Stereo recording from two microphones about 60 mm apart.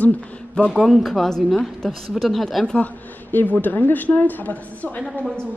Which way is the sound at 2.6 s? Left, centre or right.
Left.